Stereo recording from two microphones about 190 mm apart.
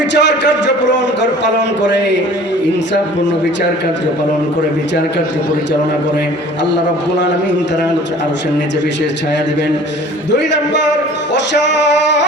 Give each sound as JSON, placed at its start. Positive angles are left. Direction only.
{"t": 0.1, "sound": "a man's voice", "side_deg": 70}